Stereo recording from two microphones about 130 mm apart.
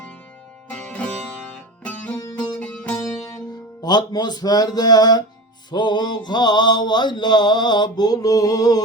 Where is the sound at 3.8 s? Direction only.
30° left (ahead or behind).